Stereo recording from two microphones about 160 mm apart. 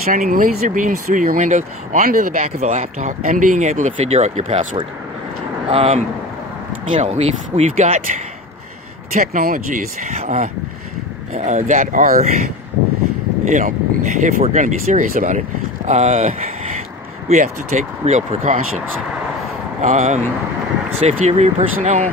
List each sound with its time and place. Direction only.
0.0 s speech: 55° right (ahead or behind)
9.1 s speech: 60° right (ahead or behind)
13.5 s speech: 50° right (ahead or behind)
19.8 s speech: 50° right (ahead or behind)